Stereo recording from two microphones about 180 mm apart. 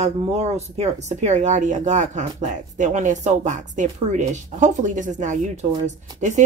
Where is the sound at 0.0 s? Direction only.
35° right (ahead or behind).